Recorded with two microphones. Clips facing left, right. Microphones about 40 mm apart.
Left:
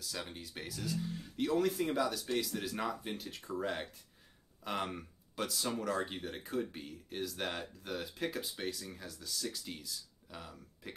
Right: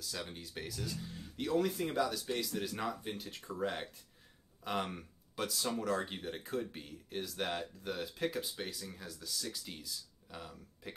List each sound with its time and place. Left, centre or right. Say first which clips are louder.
0.2 s speech: even; centre